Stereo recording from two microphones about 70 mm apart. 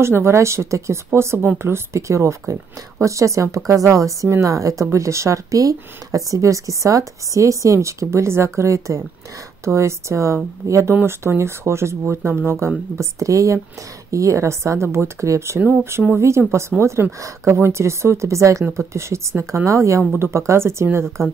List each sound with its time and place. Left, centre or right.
0.0 s speech: right